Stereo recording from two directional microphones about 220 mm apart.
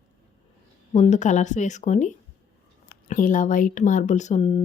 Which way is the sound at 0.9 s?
30° left (ahead or behind).